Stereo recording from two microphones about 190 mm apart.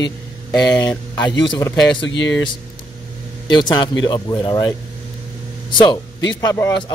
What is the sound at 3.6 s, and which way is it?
Speech, 25° left (ahead or behind).